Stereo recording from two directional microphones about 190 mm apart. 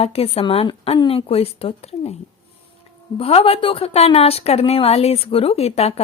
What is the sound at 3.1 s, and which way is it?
Speech, 30° left (ahead or behind).